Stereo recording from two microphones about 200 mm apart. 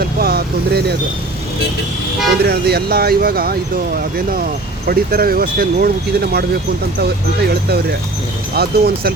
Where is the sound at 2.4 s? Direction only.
55° right (ahead or behind).